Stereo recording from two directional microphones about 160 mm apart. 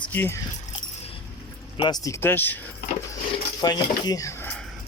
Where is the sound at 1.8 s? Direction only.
25° left (ahead or behind).